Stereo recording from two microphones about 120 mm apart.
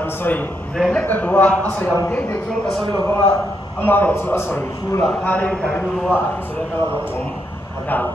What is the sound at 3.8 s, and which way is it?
A man's voice, 15° left (ahead or behind).